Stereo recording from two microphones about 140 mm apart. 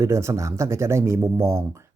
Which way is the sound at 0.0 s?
20° right (ahead or behind).